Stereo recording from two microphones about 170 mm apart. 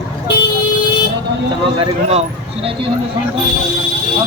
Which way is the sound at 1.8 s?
35° right (ahead or behind).